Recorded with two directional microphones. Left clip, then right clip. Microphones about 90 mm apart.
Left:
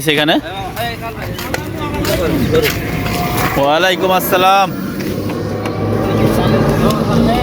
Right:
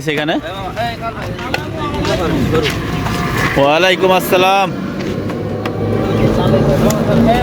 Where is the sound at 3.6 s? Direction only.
70° right (ahead or behind); by 4.7 s 45° right (ahead or behind).